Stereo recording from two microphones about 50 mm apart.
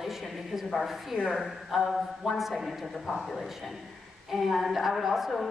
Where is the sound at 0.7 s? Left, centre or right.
Centre.